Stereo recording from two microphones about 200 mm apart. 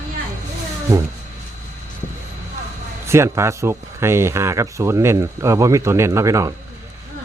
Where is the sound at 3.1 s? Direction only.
15° right (ahead or behind).